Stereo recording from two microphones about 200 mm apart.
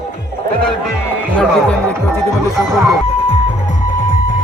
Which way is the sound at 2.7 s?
Centre (ahead or behind).